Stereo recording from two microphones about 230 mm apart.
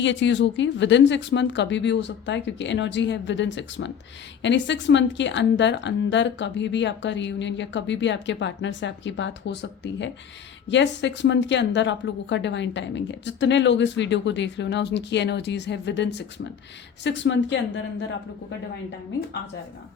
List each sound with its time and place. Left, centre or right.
0.0 s a woman's voice: left